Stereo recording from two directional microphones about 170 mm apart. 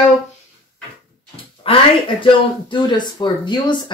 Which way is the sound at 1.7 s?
35° left (ahead or behind).